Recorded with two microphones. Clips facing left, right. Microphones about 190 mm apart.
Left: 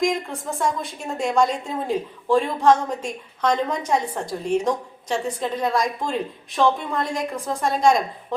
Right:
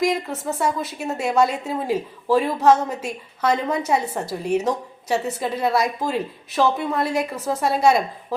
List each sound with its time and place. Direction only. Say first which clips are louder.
0.0 s a woman's voice: right 1 dB; 5° right (ahead or behind)